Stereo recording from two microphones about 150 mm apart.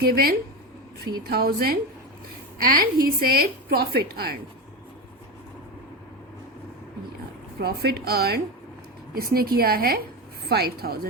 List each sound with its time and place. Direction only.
0.0 s a woman's voice: 80° right
2.6 s a woman's voice: 75° right (ahead or behind); by 4.4 s 90° right
7.6 s a woman's voice: 90° right